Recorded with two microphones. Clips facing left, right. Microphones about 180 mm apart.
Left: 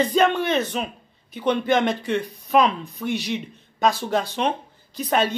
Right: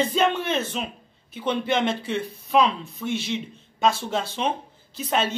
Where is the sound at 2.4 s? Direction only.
Centre (ahead or behind).